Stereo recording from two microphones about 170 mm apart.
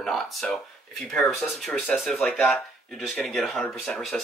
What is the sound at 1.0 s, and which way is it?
Speech, centre (ahead or behind).